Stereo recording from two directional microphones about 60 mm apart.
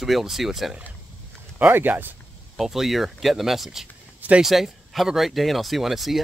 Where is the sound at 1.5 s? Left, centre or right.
Right.